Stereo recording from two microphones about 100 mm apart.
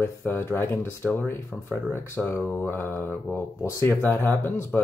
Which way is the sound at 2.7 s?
20° left (ahead or behind).